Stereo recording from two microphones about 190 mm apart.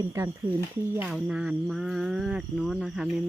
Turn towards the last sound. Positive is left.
turn(degrees=0)  # may be behind; listen again after turning